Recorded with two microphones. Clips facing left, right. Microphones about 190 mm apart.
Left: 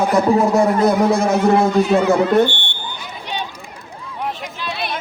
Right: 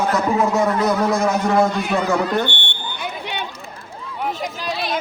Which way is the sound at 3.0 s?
60° right (ahead or behind).